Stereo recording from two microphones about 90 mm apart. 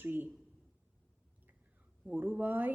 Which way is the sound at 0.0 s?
25° right (ahead or behind).